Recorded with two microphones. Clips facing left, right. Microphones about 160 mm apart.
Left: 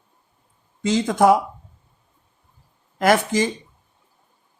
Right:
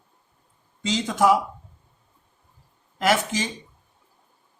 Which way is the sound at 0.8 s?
50° left (ahead or behind).